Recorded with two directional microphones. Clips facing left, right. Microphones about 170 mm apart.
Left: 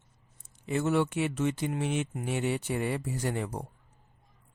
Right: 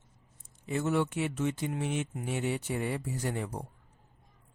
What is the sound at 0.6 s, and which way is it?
Speech, 75° left (ahead or behind).